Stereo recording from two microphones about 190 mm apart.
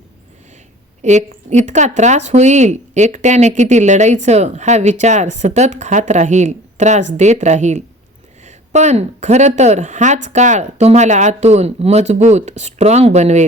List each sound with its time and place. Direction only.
1.0 s speech: 40° right (ahead or behind)